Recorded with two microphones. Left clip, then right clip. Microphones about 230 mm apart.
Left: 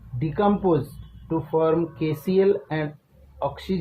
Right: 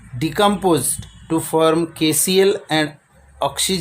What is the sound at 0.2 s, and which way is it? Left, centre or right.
Speech, right.